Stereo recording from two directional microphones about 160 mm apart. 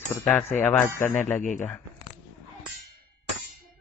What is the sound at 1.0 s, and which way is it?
Speech, 50° left (ahead or behind).